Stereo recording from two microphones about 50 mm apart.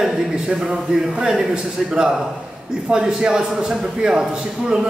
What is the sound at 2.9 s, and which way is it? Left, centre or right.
A man's voice, centre.